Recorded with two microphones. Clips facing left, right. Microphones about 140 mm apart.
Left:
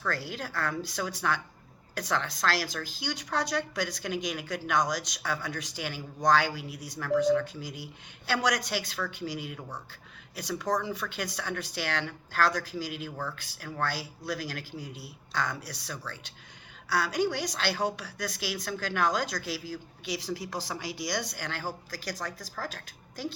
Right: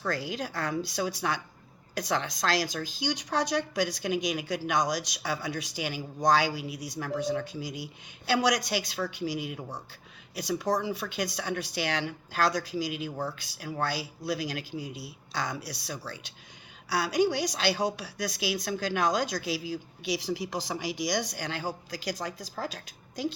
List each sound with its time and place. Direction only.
0.1 s a woman's voice: 15° right (ahead or behind)